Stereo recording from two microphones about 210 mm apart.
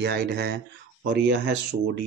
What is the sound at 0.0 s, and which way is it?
Speech, 50° right (ahead or behind).